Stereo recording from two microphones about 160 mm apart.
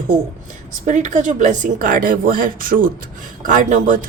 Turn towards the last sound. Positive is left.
turn(degrees=-50)  # may be behind; listen again after turning